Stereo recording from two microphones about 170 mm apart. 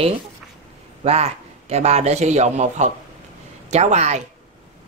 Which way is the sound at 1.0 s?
40° right (ahead or behind).